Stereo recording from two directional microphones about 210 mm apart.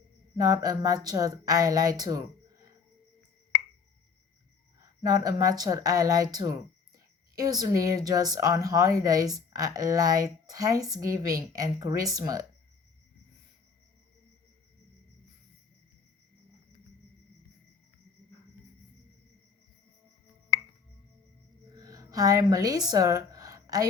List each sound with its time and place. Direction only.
0.3 s a woman's voice: 15° right (ahead or behind)
5.0 s a woman's voice: 15° right (ahead or behind)
21.8 s speech: 15° right (ahead or behind)